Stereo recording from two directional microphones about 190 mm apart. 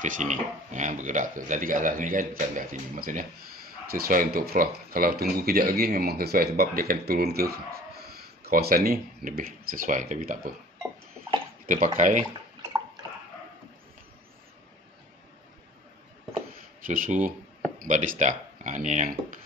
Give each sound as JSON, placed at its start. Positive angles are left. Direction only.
{"t": 0.0, "sound": "speech", "side_deg": -40}
{"t": 11.6, "sound": "speech", "side_deg": -40}
{"t": 16.8, "sound": "speech", "side_deg": -45}